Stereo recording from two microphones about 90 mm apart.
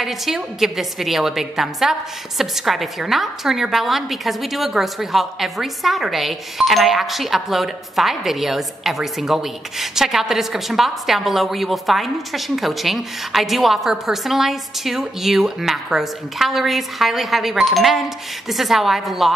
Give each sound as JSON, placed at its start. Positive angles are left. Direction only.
{"t": 0.0, "sound": "a woman's voice", "side_deg": 0}